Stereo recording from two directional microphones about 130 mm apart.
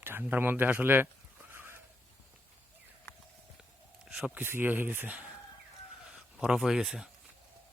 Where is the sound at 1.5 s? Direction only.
15° right (ahead or behind).